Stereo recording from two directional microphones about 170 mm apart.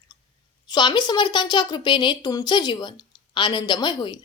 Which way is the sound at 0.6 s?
25° left (ahead or behind).